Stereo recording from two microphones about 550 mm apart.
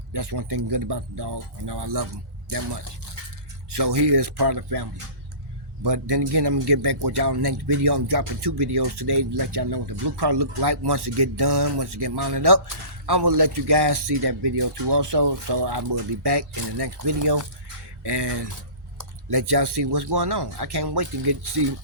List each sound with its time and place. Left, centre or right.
0.1 s speech: right
3.8 s speech: right